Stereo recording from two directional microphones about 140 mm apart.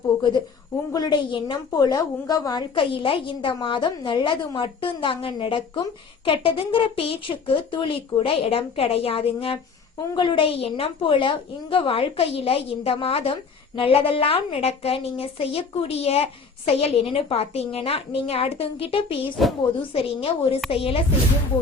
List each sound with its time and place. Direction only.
0.9 s a woman's voice: 30° left (ahead or behind)